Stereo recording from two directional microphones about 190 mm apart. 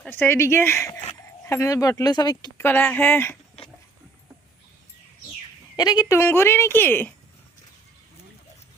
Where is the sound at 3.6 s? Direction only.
30° left (ahead or behind).